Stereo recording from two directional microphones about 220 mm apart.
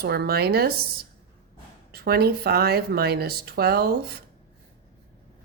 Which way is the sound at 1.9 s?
45° right (ahead or behind).